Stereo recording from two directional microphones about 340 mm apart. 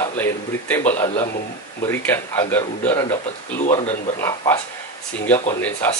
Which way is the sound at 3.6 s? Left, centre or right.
Centre.